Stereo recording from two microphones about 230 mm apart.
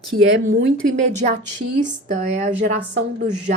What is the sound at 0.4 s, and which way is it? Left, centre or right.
A woman's voice, right.